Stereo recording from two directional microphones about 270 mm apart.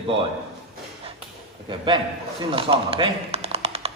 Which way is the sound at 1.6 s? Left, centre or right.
Centre.